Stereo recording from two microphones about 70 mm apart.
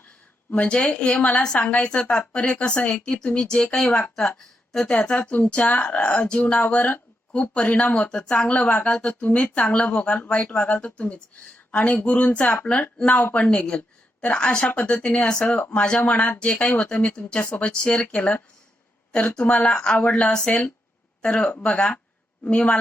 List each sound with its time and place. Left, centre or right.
0.5 s speech: centre